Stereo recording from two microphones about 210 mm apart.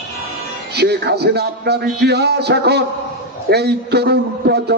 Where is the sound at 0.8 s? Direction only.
50° right (ahead or behind).